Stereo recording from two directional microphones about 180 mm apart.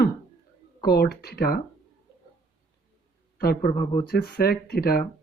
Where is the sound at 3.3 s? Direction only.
55° left (ahead or behind).